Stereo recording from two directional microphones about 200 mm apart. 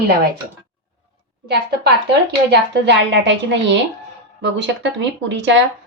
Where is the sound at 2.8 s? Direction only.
60° right (ahead or behind).